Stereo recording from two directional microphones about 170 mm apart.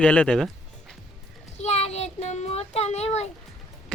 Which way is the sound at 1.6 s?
40° left (ahead or behind).